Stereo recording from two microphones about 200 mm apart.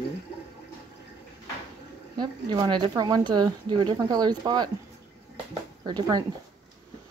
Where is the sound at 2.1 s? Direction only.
20° right (ahead or behind).